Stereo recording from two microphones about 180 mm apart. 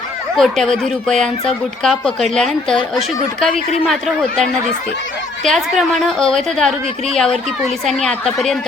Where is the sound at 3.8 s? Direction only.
Centre (ahead or behind).